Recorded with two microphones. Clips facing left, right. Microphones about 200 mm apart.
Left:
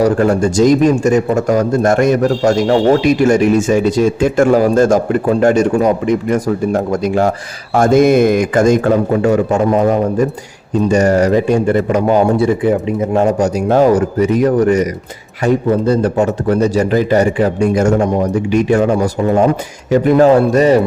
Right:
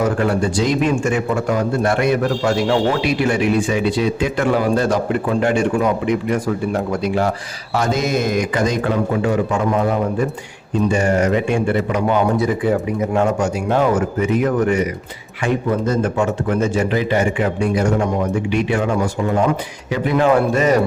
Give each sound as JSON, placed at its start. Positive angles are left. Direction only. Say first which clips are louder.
{"t": 0.0, "sound": "a man's voice", "louder": "left 6 dB", "side_deg": 40}